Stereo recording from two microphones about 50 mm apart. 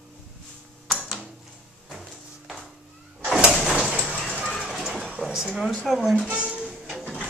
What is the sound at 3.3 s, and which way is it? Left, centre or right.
Sliding door, centre.